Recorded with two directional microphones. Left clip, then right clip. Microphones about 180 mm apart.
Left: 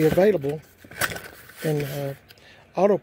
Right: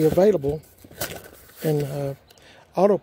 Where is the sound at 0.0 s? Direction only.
10° right (ahead or behind).